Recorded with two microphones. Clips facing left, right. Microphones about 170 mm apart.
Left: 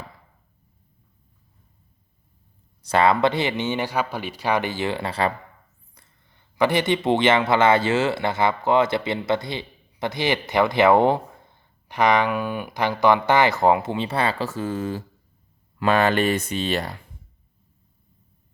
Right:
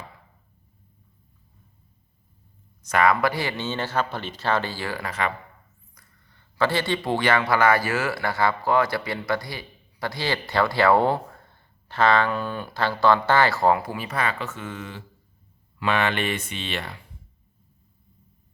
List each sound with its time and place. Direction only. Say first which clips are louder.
2.8 s speech: left 2 dB; 30° left (ahead or behind)